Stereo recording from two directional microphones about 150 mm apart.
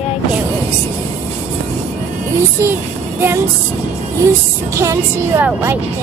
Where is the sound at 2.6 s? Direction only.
15° right (ahead or behind).